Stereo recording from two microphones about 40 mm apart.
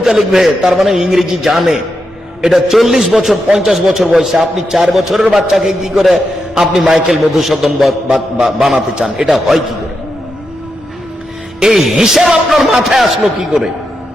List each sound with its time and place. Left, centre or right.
0.0 s a man's voice: centre
8.1 s a man's voice: centre
9.3 s speech: centre
11.6 s music: right
11.9 s a man's voice: centre